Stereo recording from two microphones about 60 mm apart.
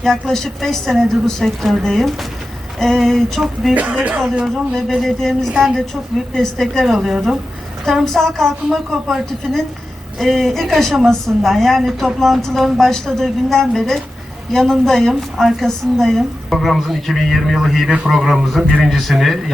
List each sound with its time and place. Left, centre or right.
0.0 s a woman's voice: centre
4.0 s speech: right
4.7 s speech: centre
5.0 s a woman's voice: centre
6.8 s a woman's voice: centre
10.2 s a woman's voice: centre